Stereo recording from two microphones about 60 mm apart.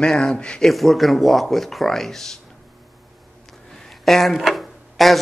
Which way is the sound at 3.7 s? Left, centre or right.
Centre.